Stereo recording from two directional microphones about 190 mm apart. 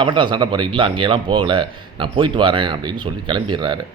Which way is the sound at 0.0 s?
25° right (ahead or behind).